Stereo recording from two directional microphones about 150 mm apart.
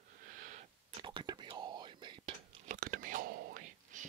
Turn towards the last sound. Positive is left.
turn(degrees=-55)  # may be behind; listen again after turning